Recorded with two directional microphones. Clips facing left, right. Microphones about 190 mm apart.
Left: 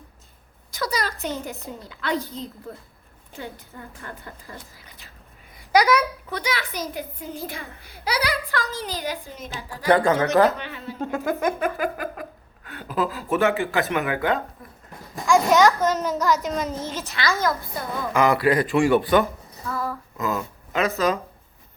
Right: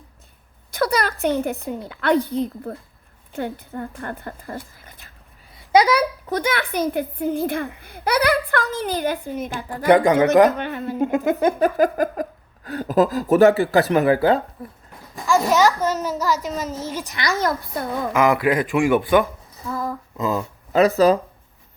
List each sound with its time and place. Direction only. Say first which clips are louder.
0.7 s a sound: right 6 dB; 60° right (ahead or behind)
1.2 s a woman's voice: right 9 dB; 60° right (ahead or behind)
5.7 s speech: right 3 dB; 30° right (ahead or behind)
6.3 s a woman's voice: right 6 dB; 55° right (ahead or behind)
9.9 s a child's voice: right 4 dB; 15° right (ahead or behind)
10.6 s speech: right 8 dB; 50° right (ahead or behind)
10.9 s a child's voice: right 6 dB; 15° right (ahead or behind)
11.3 s speech: right 6 dB; 30° right (ahead or behind)
11.8 s a woman's voice: right 8 dB; 40° right (ahead or behind)
15.3 s a child's voice: even; 5° right (ahead or behind)
18.5 s a child's voice: even; 15° right (ahead or behind); by 21.2 s 35° right (ahead or behind)